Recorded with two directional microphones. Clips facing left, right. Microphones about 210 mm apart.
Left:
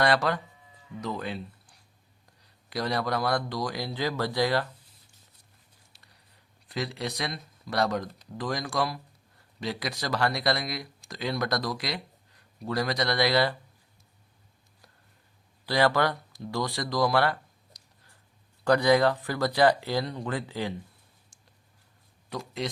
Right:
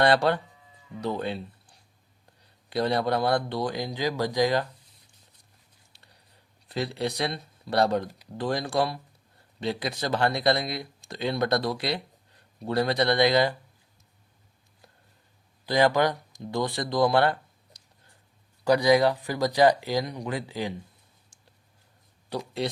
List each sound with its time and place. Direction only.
0.0 s a man's voice: 25° right (ahead or behind)
6.7 s a man's voice: 30° right (ahead or behind)
15.6 s a man's voice: 15° right (ahead or behind)
18.6 s speech: 10° right (ahead or behind)
22.3 s speech: 30° right (ahead or behind)